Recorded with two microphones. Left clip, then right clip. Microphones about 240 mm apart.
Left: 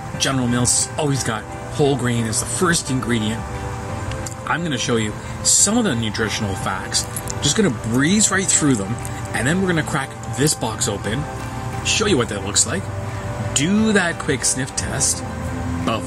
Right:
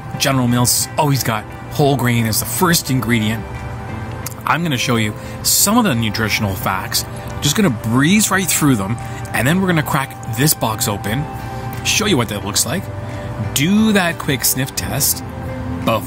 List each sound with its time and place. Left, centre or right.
0.2 s speech: right
4.5 s speech: right
13.8 s speech: right